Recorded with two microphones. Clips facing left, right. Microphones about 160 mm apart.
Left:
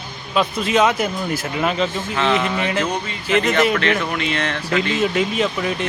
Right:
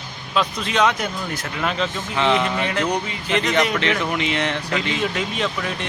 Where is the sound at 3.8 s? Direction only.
20° right (ahead or behind).